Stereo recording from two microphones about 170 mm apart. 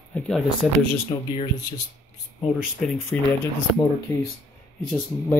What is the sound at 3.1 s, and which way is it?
Speech, 5° left (ahead or behind).